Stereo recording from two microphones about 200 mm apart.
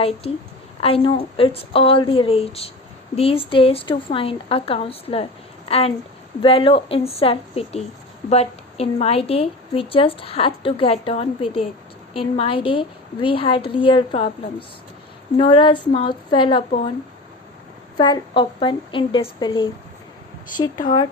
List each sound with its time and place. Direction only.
0.8 s a woman's voice: 30° left (ahead or behind)
15.4 s a woman's voice: 25° left (ahead or behind)
17.9 s a woman's voice: 20° left (ahead or behind)